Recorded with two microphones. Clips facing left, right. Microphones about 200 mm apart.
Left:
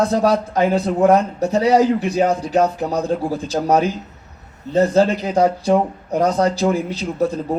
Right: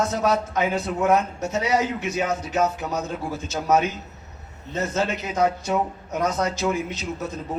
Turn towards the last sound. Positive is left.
turn(degrees=35)  # may be behind; listen again after turning